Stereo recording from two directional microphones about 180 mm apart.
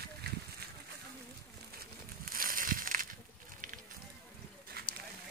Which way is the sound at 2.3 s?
50° right (ahead or behind).